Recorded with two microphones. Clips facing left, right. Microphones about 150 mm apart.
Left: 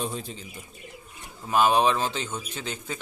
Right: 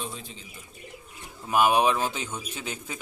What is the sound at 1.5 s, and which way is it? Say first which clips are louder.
Speech: left 1 dB; 10° right (ahead or behind).